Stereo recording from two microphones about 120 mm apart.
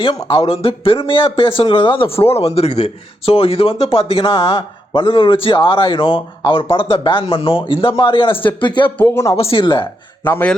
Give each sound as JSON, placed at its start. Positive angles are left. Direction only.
{"t": 0.0, "sound": "speech", "side_deg": 40}
{"t": 9.0, "sound": "speech", "side_deg": 20}
{"t": 9.3, "sound": "speech", "side_deg": 50}
{"t": 10.2, "sound": "a man's voice", "side_deg": 15}